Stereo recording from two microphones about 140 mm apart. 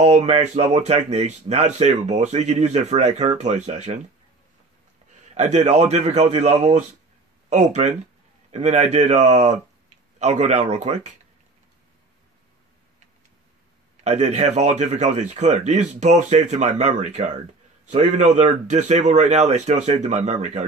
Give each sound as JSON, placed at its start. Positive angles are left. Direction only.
{"t": 0.0, "sound": "speech", "side_deg": -50}
{"t": 5.3, "sound": "speech", "side_deg": -55}
{"t": 14.0, "sound": "speech", "side_deg": -55}